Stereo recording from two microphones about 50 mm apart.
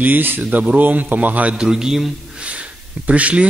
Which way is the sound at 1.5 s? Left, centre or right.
Centre.